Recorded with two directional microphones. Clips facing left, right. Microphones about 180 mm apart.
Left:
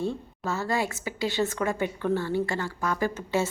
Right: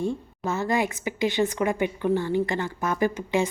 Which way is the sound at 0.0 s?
15° right (ahead or behind).